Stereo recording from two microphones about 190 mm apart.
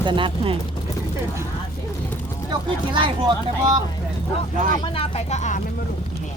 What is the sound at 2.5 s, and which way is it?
Speech, 25° right (ahead or behind).